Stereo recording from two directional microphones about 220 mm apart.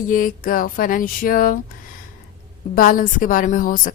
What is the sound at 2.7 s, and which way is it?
Speech, 40° left (ahead or behind).